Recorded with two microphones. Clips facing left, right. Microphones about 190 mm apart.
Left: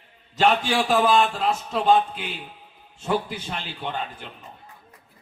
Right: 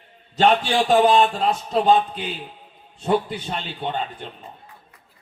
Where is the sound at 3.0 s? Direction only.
35° right (ahead or behind).